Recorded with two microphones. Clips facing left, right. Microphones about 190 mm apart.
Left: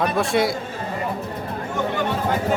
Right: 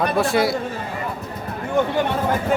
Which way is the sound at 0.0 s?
Centre (ahead or behind).